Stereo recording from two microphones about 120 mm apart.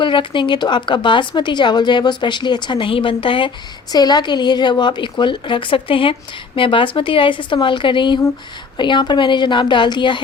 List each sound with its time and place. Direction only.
0.0 s speech: 45° left (ahead or behind)